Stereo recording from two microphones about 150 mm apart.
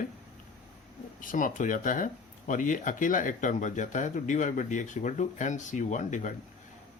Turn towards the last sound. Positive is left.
turn(degrees=55)  # may be behind; listen again after turning